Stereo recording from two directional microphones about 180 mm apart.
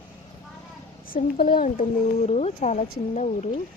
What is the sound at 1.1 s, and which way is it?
Speech, 55° left (ahead or behind).